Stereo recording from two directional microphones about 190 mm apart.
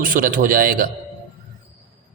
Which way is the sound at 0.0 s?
45° right (ahead or behind).